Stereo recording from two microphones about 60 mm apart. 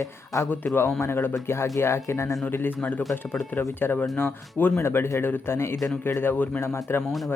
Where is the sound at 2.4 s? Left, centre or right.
Left.